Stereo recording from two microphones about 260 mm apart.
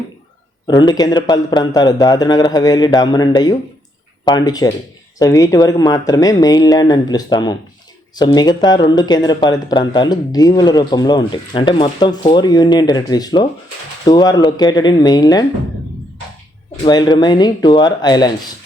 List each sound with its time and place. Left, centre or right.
0.7 s speech: centre
16.8 s speech: centre